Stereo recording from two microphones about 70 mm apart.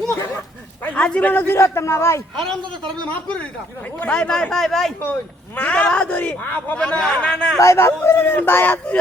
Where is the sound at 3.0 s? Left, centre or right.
Left; by 4.9 s centre.